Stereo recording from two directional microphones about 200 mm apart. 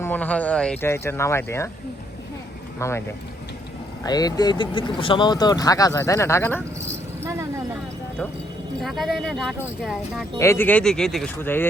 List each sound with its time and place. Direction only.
0.0 s speech: 10° left (ahead or behind)
2.7 s speech: 15° left (ahead or behind)
4.0 s speech: 20° left (ahead or behind)
7.2 s a sound: 15° right (ahead or behind)
8.8 s speech: centre (ahead or behind)
10.3 s speech: 15° left (ahead or behind)